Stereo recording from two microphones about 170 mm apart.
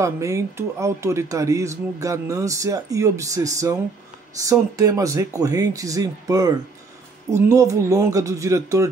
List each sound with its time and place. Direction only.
0.0 s speech: 20° right (ahead or behind)
7.5 s speech: 20° right (ahead or behind)